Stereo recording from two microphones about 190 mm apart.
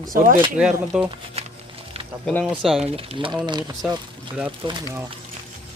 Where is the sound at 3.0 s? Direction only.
30° right (ahead or behind).